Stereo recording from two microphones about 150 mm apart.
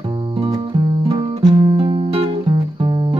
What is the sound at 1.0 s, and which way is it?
Music, 25° right (ahead or behind).